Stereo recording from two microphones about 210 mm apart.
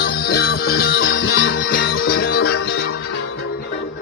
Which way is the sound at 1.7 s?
45° left (ahead or behind).